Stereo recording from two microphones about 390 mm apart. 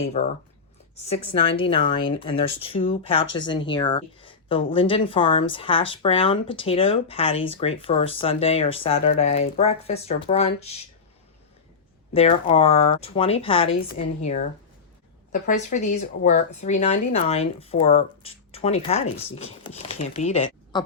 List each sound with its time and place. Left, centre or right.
0.0 s speech: centre
1.3 s speech: centre
12.1 s speech: centre
15.3 s a woman's voice: centre